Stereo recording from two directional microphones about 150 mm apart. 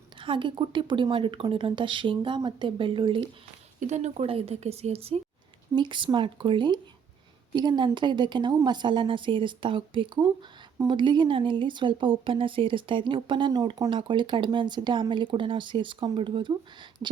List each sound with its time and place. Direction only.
0.2 s speech: 35° right (ahead or behind)
3.8 s speech: 50° right (ahead or behind); by 16.6 s 30° right (ahead or behind)